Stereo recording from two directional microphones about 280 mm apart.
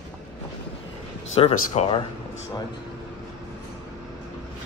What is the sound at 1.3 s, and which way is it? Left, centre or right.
Speech, left.